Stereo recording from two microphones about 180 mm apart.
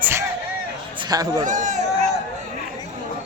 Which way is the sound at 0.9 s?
20° right (ahead or behind).